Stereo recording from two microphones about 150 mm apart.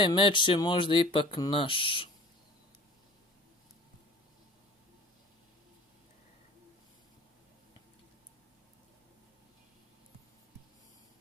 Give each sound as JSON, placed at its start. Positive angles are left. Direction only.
{"t": 0.0, "sound": "speech", "side_deg": 35}